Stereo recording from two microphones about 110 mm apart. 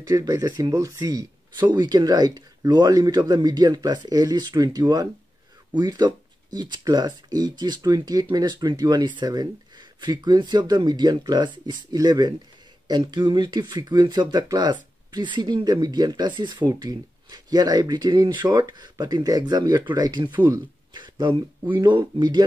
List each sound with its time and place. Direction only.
0.1 s speech: 30° right (ahead or behind)
20.3 s speech: 20° right (ahead or behind)
20.9 s a sound: 45° right (ahead or behind)
21.7 s speech: 45° right (ahead or behind)